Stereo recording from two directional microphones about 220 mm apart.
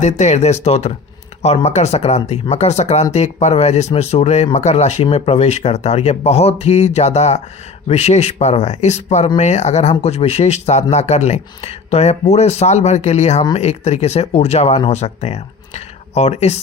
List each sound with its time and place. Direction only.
0.0 s speech: 30° left (ahead or behind)